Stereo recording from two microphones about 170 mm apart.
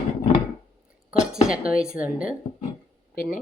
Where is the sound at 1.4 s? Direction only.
5° right (ahead or behind).